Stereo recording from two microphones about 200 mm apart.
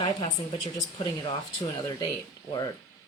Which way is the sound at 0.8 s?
20° left (ahead or behind).